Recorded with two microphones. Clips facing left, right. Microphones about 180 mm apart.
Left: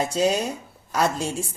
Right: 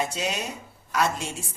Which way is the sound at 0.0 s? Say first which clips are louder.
Left 7 dB; 35° left (ahead or behind).